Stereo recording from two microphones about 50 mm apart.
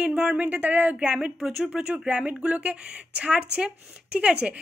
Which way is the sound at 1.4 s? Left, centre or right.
Centre.